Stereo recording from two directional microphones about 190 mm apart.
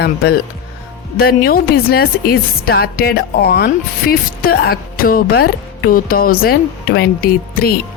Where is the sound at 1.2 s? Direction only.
50° left (ahead or behind).